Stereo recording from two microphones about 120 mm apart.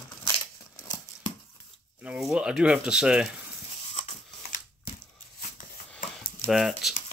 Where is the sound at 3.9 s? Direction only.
70° left (ahead or behind).